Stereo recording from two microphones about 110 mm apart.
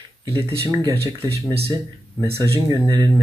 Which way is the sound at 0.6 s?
30° right (ahead or behind).